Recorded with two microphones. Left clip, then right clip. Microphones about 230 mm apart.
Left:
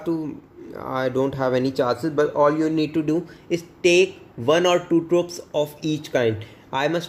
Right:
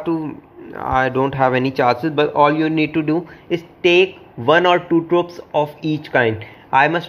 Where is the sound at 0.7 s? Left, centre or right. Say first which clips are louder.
Right 6 dB; centre.